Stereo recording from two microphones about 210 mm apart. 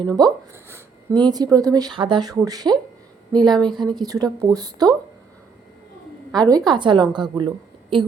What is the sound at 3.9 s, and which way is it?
A woman's voice, 20° right (ahead or behind).